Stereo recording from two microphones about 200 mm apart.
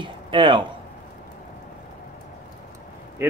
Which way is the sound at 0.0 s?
25° right (ahead or behind).